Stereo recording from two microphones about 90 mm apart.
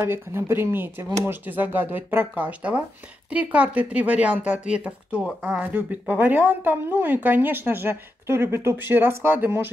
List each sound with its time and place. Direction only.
0.0 s speech: 25° right (ahead or behind)